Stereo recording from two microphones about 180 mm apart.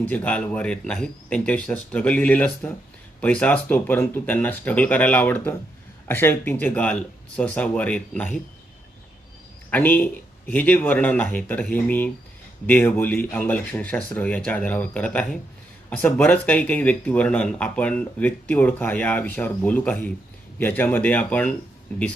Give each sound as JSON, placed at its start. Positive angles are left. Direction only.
{"t": 0.0, "sound": "speech", "side_deg": 10}
{"t": 9.6, "sound": "speech", "side_deg": 10}